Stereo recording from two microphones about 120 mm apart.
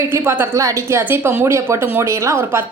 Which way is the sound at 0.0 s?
20° right (ahead or behind).